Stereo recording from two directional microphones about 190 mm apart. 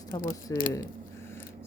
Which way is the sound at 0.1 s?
45° left (ahead or behind).